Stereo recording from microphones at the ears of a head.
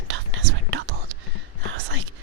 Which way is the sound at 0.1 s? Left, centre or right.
Right.